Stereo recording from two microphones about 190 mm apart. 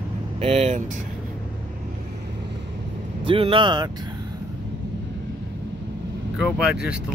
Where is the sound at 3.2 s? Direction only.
30° right (ahead or behind).